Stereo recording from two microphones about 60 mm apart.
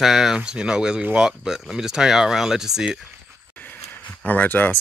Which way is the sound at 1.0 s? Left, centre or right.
Right.